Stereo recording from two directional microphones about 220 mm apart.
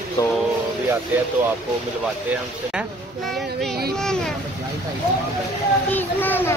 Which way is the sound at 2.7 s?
Centre (ahead or behind).